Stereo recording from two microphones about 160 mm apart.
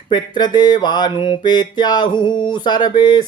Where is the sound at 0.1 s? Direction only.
25° left (ahead or behind).